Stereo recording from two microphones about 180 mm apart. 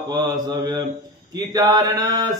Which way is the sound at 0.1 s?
25° right (ahead or behind).